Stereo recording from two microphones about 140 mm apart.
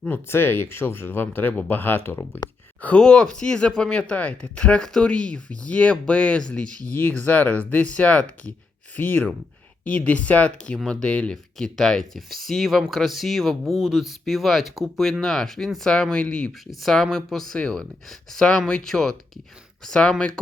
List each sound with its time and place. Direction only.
0.0 s speech: 15° left (ahead or behind)